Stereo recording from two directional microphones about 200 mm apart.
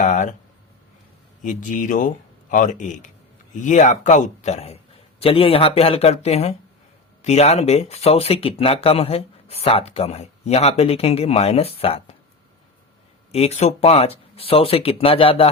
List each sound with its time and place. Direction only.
0.0 s a sound: 40° left (ahead or behind)
1.4 s speech: 40° left (ahead or behind)
13.3 s speech: 30° left (ahead or behind)